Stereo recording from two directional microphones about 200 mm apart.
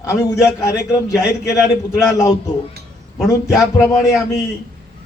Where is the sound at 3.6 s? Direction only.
15° left (ahead or behind).